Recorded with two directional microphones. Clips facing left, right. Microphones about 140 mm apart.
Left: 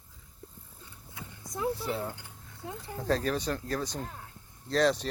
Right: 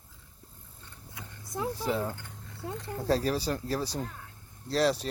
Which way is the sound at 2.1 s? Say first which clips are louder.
Right 3 dB; 5° left (ahead or behind).